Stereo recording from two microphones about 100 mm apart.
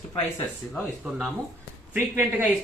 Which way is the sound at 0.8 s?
5° right (ahead or behind).